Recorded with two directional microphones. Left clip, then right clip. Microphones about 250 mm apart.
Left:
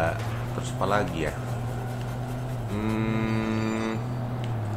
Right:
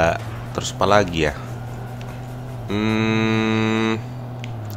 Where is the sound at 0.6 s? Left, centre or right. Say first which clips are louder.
Right 9 dB; right.